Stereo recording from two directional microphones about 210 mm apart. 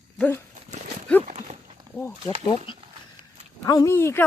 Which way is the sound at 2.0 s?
10° left (ahead or behind).